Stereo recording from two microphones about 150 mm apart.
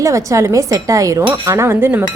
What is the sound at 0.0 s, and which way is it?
Speech, 20° right (ahead or behind).